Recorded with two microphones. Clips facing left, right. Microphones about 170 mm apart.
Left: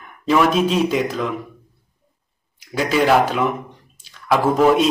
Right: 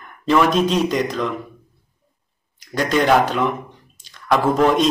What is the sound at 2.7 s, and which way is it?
A man's voice, 5° left (ahead or behind).